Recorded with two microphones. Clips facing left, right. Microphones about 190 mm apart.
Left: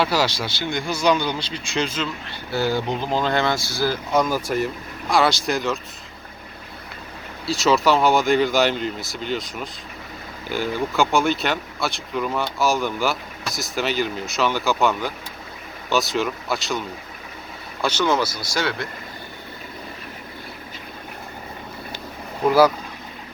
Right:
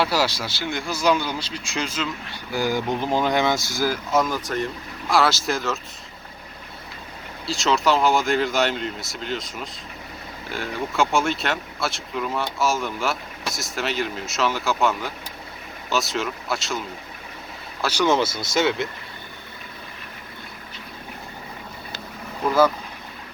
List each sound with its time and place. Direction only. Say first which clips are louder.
0.0 s speech: left 1 dB; 5° right (ahead or behind)
4.1 s speech: left 4 dB; centre (ahead or behind)
7.4 s speech: left 3 dB; centre (ahead or behind)
17.8 s speech: even; 10° right (ahead or behind)
18.1 s speech: right 1 dB; 25° right (ahead or behind)